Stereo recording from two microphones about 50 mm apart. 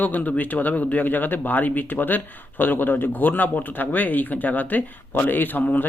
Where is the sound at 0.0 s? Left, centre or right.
Left.